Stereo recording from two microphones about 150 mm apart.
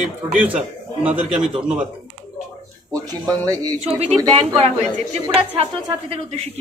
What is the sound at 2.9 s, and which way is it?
Speech, 25° right (ahead or behind).